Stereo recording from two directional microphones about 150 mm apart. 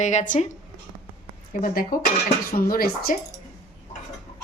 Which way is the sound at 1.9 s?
80° left.